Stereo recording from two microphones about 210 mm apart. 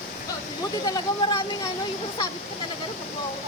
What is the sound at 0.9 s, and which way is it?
Speech, 20° left (ahead or behind).